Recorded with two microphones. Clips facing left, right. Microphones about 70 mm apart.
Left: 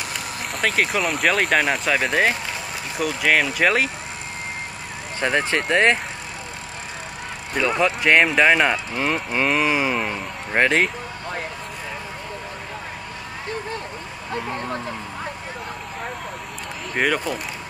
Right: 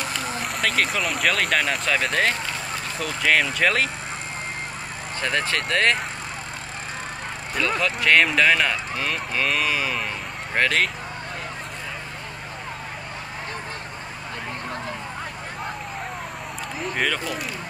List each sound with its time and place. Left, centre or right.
0.5 s speech: centre
5.2 s speech: left
7.5 s speech: centre
14.3 s speech: left
16.9 s speech: centre